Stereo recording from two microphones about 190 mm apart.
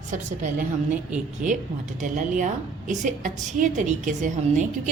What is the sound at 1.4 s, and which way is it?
A woman's voice, 40° right (ahead or behind).